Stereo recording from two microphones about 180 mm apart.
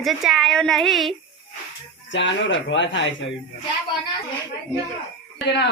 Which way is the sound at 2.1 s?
90° left.